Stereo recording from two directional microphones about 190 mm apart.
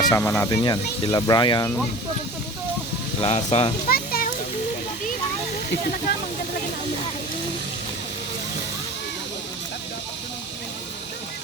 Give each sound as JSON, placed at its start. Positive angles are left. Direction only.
{"t": 0.1, "sound": "speech", "side_deg": 15}
{"t": 3.2, "sound": "speech", "side_deg": 30}
{"t": 3.8, "sound": "a sound", "side_deg": 50}